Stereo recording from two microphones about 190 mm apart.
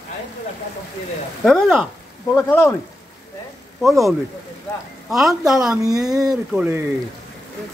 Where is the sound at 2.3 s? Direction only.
10° left (ahead or behind).